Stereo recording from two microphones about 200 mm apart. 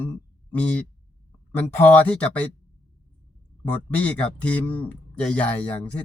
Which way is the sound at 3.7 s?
5° left (ahead or behind).